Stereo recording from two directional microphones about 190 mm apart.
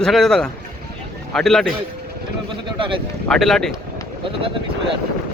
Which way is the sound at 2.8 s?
25° right (ahead or behind).